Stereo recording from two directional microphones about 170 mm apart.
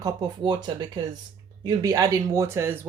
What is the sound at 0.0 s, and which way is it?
Speech, 25° right (ahead or behind).